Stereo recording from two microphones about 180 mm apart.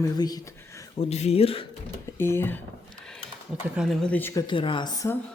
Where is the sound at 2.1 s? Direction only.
15° left (ahead or behind).